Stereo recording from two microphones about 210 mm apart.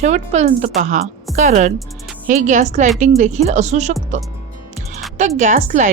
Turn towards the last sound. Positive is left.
turn(degrees=-35)  # may be behind; listen again after turning